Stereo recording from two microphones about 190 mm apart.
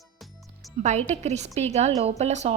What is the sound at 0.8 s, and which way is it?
A woman's voice, 35° right (ahead or behind).